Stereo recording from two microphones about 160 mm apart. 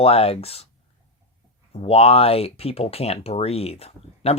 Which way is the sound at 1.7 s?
35° left (ahead or behind).